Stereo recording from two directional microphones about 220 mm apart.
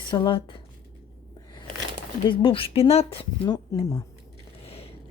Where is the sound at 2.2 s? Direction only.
25° left (ahead or behind).